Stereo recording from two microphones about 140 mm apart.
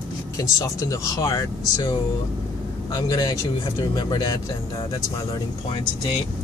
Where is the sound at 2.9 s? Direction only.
25° left (ahead or behind).